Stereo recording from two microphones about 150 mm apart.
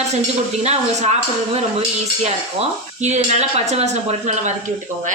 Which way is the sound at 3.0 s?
50° right (ahead or behind).